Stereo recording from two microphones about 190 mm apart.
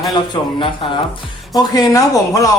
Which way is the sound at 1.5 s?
20° left (ahead or behind).